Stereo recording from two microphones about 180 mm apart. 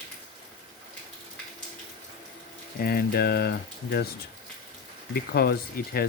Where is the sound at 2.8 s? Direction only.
60° left (ahead or behind).